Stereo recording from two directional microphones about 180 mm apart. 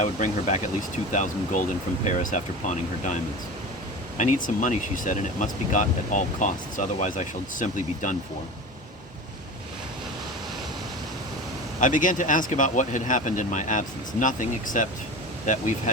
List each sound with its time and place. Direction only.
0.0 s speech: 40° left (ahead or behind)
11.8 s speech: 45° left (ahead or behind)